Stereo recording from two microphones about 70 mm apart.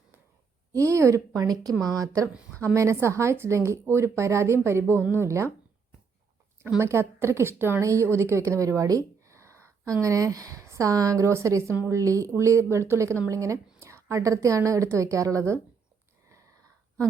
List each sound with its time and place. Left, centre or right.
0.7 s a woman's voice: right
2.6 s a woman's voice: right
6.7 s a woman's voice: right